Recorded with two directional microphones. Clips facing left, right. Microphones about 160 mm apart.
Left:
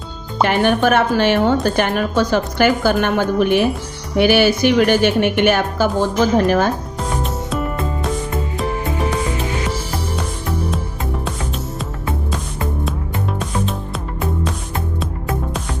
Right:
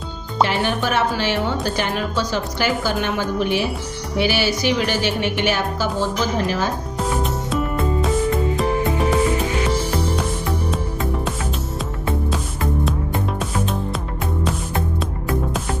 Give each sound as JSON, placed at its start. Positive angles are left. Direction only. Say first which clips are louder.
{"t": 0.4, "sound": "a woman's voice", "louder": "left 6 dB", "side_deg": 55}
{"t": 8.5, "sound": "music", "louder": "right 2 dB", "side_deg": 0}